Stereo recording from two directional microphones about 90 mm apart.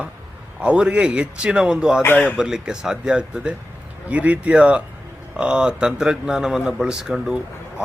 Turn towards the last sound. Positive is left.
turn(degrees=-5)  # may be behind; listen again after turning